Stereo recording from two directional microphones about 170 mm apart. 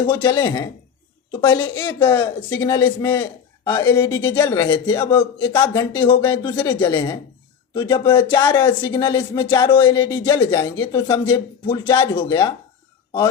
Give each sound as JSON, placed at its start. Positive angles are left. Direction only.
{"t": 0.2, "sound": "speech", "side_deg": 25}
{"t": 1.6, "sound": "speech", "side_deg": 30}
{"t": 2.0, "sound": "a man's voice", "side_deg": 15}